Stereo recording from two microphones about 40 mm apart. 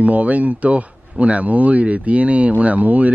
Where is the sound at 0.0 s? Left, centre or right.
Right.